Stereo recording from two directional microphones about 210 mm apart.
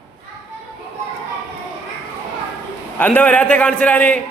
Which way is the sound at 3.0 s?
10° left (ahead or behind).